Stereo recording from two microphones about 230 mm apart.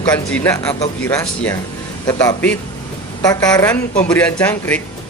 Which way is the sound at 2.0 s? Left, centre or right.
Centre.